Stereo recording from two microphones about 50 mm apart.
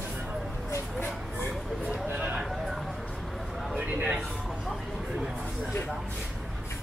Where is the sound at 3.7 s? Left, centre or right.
Right.